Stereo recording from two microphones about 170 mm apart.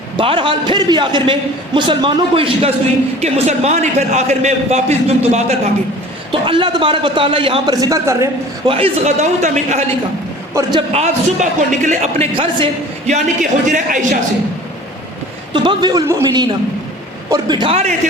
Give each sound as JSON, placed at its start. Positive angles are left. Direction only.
{"t": 0.2, "sound": "a man's voice", "side_deg": -30}
{"t": 8.6, "sound": "a man's voice", "side_deg": -35}
{"t": 10.5, "sound": "a man's voice", "side_deg": -20}
{"t": 10.9, "sound": "a man's voice", "side_deg": -45}
{"t": 15.5, "sound": "a man's voice", "side_deg": -25}